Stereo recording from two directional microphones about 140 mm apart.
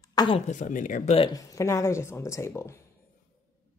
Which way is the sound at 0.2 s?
25° left (ahead or behind).